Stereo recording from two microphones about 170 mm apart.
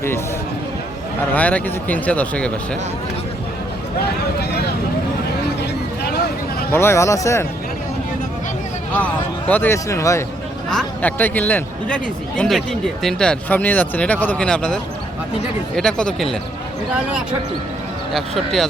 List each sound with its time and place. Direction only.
1.3 s speech: 10° left (ahead or behind)
4.0 s a sound: 70° left (ahead or behind)
6.7 s speech: 15° left (ahead or behind)
9.5 s speech: 10° left (ahead or behind)
10.7 s speech: 5° left (ahead or behind)
18.1 s speech: centre (ahead or behind)